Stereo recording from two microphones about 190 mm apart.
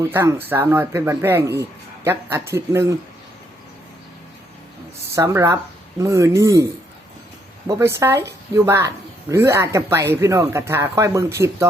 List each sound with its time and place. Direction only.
0.0 s speech: 15° right (ahead or behind)
5.1 s speech: 15° right (ahead or behind)
7.7 s speech: 15° right (ahead or behind)